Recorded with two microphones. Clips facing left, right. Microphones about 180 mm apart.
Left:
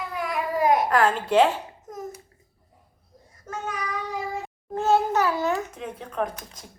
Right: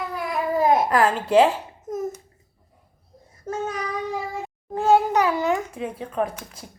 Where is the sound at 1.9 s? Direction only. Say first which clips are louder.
Right 10 dB; 25° right (ahead or behind).